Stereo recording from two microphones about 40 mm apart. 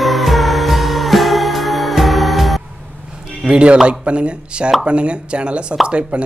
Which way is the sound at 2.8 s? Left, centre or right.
Right.